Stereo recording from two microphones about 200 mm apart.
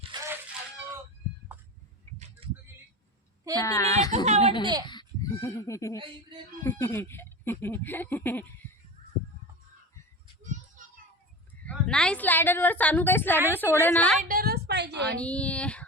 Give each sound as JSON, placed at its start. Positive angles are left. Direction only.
{"t": 0.1, "sound": "fowl", "side_deg": -20}
{"t": 2.4, "sound": "a sound", "side_deg": -25}
{"t": 3.6, "sound": "speech", "side_deg": 15}
{"t": 4.6, "sound": "a child's voice", "side_deg": -20}
{"t": 4.9, "sound": "speech", "side_deg": 20}
{"t": 11.6, "sound": "speech", "side_deg": 5}
{"t": 14.2, "sound": "a sound", "side_deg": -45}
{"t": 15.1, "sound": "speech", "side_deg": 5}